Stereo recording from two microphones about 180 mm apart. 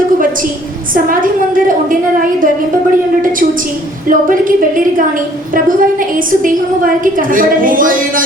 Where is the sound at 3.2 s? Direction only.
50° right (ahead or behind).